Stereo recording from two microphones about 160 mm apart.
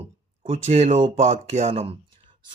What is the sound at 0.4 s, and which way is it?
Speech, 40° right (ahead or behind).